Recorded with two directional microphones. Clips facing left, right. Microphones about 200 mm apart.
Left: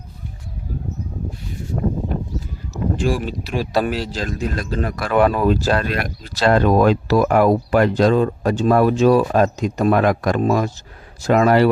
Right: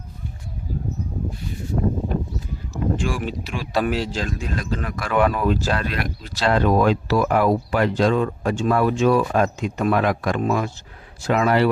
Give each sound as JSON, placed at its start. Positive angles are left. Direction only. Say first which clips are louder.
{"t": 2.7, "sound": "boat", "louder": "left 3 dB", "side_deg": 35}
{"t": 3.4, "sound": "a man's voice", "louder": "left 3 dB", "side_deg": 35}